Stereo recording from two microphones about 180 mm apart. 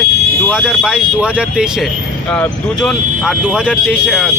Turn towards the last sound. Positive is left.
turn(degrees=-5)  # may be behind; listen again after turning